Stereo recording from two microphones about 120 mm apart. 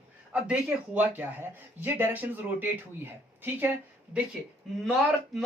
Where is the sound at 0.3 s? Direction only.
10° right (ahead or behind).